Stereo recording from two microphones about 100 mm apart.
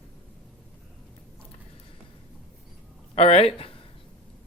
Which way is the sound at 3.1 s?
90° left.